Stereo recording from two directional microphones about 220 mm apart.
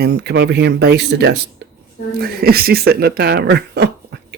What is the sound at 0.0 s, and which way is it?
Speech, 50° right (ahead or behind).